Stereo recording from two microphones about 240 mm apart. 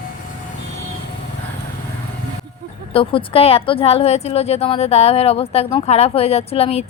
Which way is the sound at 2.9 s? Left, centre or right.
Left.